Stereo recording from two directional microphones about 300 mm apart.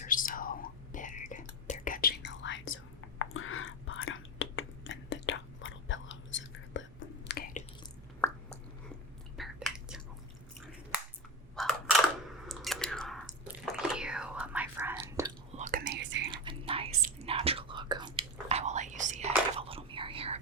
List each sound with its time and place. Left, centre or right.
0.0 s whispering: left
9.4 s chewing: centre
11.5 s a sound: centre
12.5 s chewing: centre
15.5 s whispering: right
16.3 s whispering: centre